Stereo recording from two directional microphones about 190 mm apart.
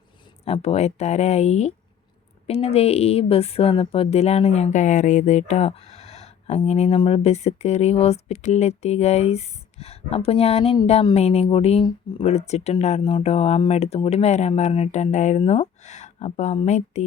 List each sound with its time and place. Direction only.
0.4 s speech: 30° left (ahead or behind)